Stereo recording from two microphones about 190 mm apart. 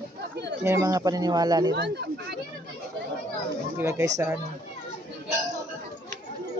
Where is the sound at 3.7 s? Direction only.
15° right (ahead or behind).